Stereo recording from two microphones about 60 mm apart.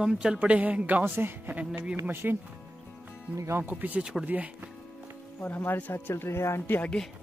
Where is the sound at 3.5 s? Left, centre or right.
Right.